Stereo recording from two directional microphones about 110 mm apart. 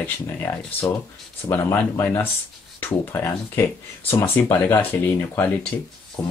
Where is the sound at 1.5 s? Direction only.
20° left (ahead or behind).